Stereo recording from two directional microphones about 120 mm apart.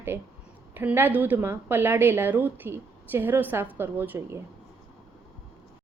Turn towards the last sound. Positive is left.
turn(degrees=-20)  # may be behind; listen again after turning